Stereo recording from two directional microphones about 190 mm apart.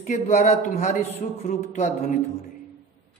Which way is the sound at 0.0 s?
40° left (ahead or behind).